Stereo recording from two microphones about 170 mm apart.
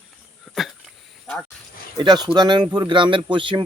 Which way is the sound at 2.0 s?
25° right (ahead or behind).